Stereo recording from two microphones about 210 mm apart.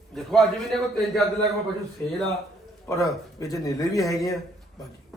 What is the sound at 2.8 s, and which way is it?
A man's voice, 15° left (ahead or behind).